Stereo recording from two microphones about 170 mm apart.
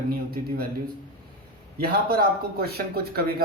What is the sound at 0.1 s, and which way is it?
Speech, 65° right (ahead or behind).